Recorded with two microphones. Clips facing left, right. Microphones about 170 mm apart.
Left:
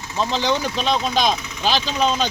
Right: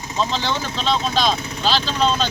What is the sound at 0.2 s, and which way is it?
Speech, 15° left (ahead or behind).